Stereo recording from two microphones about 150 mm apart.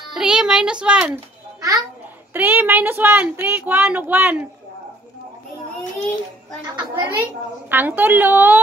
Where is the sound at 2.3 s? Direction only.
10° right (ahead or behind).